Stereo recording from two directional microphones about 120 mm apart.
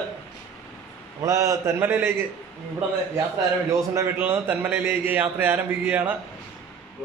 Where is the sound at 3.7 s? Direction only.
25° right (ahead or behind).